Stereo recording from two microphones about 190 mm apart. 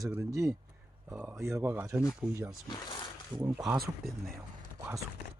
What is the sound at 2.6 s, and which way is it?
Speech, 25° left (ahead or behind).